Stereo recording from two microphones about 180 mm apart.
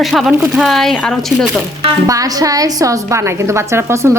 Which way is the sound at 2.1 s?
20° right (ahead or behind).